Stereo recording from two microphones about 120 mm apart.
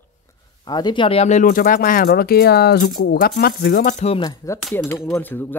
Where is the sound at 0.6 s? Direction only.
35° left (ahead or behind).